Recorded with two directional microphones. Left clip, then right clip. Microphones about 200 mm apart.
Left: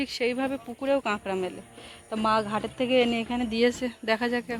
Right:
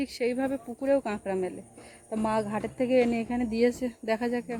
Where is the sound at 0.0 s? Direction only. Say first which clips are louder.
Left 1 dB; 5° right (ahead or behind).